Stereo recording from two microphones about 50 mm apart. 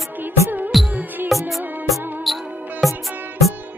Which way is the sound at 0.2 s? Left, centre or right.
Right.